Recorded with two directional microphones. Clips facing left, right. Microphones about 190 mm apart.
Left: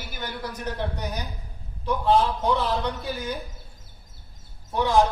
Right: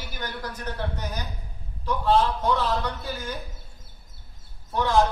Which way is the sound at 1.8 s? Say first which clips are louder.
Left 1 dB; 10° left (ahead or behind).